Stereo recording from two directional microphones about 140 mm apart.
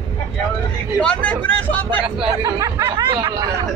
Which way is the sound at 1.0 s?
10° left (ahead or behind).